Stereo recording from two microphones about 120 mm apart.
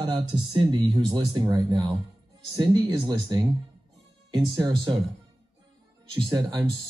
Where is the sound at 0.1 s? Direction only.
50° right (ahead or behind).